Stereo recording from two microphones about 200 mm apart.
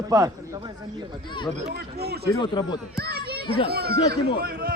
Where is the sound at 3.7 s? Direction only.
50° right (ahead or behind).